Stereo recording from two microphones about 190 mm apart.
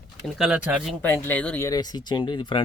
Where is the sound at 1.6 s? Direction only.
20° left (ahead or behind).